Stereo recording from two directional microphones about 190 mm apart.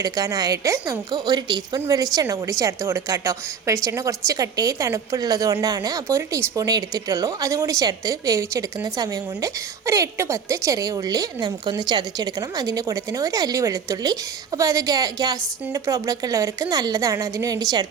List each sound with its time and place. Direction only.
0.0 s a woman's voice: 20° right (ahead or behind)